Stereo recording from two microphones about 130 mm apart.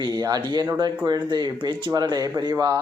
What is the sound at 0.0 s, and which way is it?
Speech, 30° right (ahead or behind).